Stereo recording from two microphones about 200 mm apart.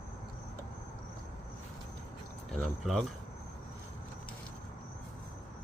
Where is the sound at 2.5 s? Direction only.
Centre (ahead or behind).